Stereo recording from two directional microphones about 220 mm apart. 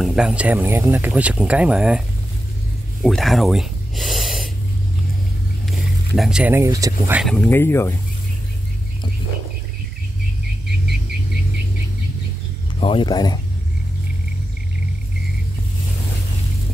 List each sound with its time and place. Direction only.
0.0 s speech: 5° right (ahead or behind)
6.1 s speech: centre (ahead or behind)
7.2 s speech: 5° left (ahead or behind)
12.8 s speech: 20° left (ahead or behind)